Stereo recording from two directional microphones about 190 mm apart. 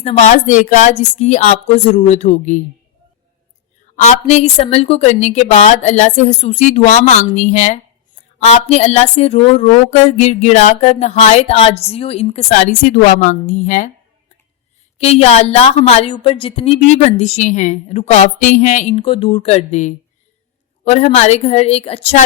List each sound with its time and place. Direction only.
0.0 s speech: 35° left (ahead or behind)
3.9 s speech: 35° left (ahead or behind)
14.9 s speech: 35° left (ahead or behind)